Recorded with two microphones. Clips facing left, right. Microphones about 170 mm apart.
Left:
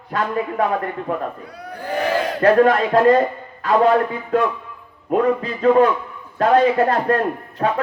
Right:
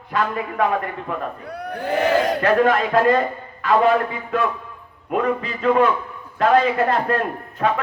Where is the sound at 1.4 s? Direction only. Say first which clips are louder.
Right 4 dB; 60° right (ahead or behind).